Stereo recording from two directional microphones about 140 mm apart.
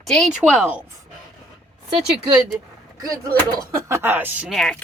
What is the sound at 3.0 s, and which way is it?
Speech, 25° right (ahead or behind).